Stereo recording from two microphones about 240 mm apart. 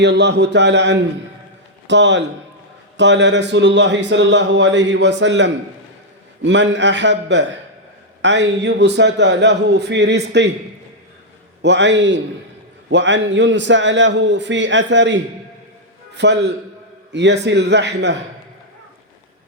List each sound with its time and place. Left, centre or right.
0.0 s speech: right
11.6 s speech: right